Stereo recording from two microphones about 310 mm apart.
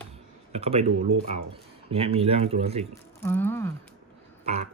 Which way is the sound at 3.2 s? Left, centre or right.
Centre.